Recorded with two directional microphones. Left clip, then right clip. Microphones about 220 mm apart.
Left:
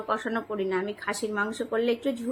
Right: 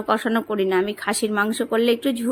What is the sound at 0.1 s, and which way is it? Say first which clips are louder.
Speech: right 8 dB; 45° right (ahead or behind).